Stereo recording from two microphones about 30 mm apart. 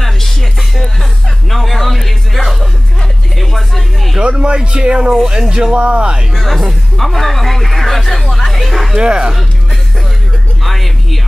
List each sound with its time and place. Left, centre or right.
0.0 s music: centre
1.5 s a sound: centre
3.3 s music: centre
4.2 s speech: right
5.8 s speech: right
6.3 s speech: centre
8.9 s speech: right
10.6 s a sound: centre